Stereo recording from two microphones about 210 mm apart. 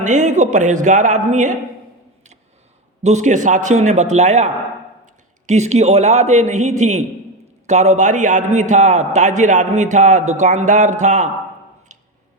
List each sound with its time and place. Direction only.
0.0 s a man's voice: 35° right (ahead or behind)
3.0 s a man's voice: 35° right (ahead or behind)
11.9 s a sound: 35° right (ahead or behind)